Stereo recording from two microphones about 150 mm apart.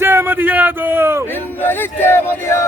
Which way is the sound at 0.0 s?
15° right (ahead or behind).